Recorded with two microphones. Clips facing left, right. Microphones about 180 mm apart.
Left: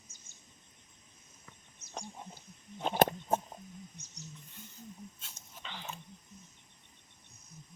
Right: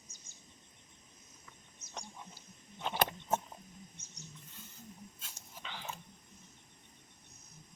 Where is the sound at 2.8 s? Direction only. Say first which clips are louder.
Left 6 dB; 45° left (ahead or behind).